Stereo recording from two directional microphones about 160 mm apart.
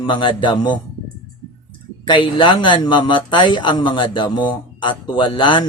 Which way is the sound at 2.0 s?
30° left (ahead or behind).